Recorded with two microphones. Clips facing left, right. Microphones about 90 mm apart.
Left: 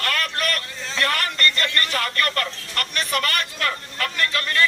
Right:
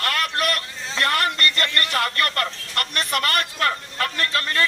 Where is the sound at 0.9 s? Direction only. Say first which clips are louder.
Right 2 dB; 30° right (ahead or behind).